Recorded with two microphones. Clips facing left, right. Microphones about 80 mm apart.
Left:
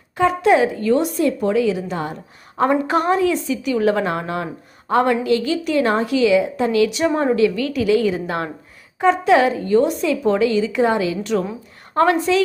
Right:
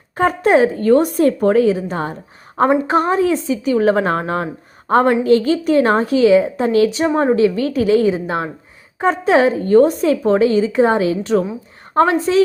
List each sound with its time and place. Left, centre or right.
0.2 s speech: right